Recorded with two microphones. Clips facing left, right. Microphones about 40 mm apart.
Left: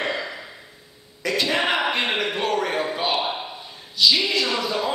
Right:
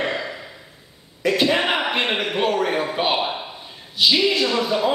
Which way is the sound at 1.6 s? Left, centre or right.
Centre.